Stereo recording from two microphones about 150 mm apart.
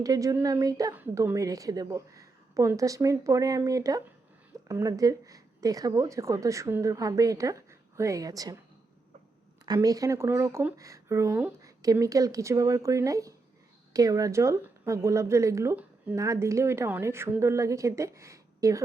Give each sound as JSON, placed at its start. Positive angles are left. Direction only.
{"t": 0.0, "sound": "speech", "side_deg": -25}
{"t": 9.6, "sound": "speech", "side_deg": -25}